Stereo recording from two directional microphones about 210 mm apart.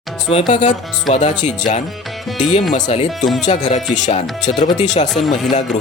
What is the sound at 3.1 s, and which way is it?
Speech, centre (ahead or behind).